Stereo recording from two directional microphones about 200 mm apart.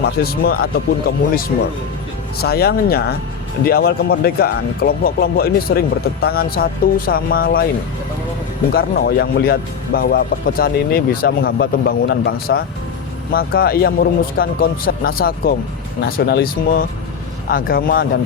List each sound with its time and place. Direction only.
0.2 s speech: 50° left (ahead or behind)
8.7 s speech: 50° left (ahead or behind)